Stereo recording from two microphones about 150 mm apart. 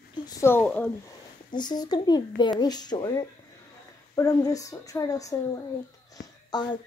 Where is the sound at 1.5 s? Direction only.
30° left (ahead or behind).